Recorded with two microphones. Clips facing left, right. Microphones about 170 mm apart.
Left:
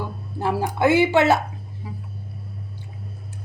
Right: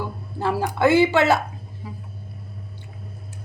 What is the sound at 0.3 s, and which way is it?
Speech, 20° left (ahead or behind).